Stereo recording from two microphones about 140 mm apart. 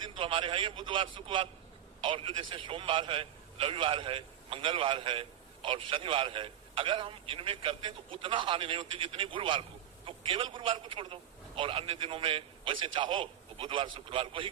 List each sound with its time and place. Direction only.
0.2 s a man's voice: 35° right (ahead or behind)